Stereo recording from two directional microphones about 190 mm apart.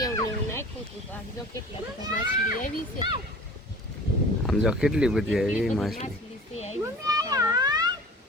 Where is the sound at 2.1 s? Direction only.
45° left (ahead or behind).